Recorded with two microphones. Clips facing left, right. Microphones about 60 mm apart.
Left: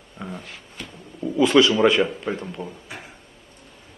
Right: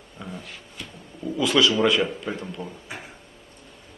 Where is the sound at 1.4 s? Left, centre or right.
Left.